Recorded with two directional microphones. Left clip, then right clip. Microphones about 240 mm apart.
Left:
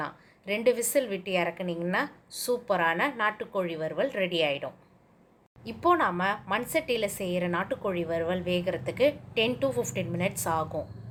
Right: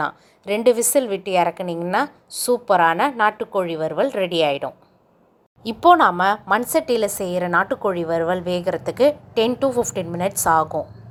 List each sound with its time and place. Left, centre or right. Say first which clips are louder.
0.0 s a woman's voice: right 11 dB; right